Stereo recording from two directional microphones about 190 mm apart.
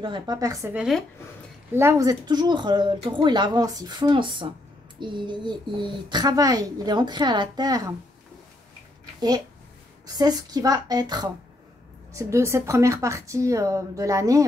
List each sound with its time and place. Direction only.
0.0 s a child's voice: 25° right (ahead or behind)
0.7 s a child's voice: 5° right (ahead or behind); by 7.9 s 20° right (ahead or behind)
10.0 s a child's voice: 20° right (ahead or behind)